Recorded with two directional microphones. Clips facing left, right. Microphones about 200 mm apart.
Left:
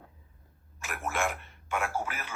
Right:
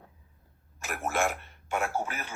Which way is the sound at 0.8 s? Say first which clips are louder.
Right 3 dB; 40° right (ahead or behind).